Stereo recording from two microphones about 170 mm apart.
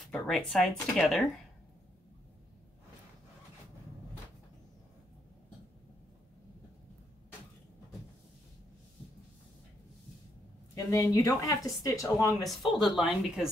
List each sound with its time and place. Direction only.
0.1 s speech: centre (ahead or behind)
10.7 s speech: 20° left (ahead or behind)
12.4 s speech: centre (ahead or behind)